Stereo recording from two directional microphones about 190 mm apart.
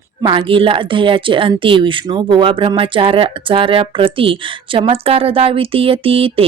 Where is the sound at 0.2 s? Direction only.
25° right (ahead or behind).